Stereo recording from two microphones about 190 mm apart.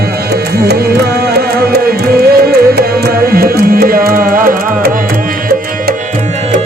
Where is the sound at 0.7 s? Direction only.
55° right (ahead or behind).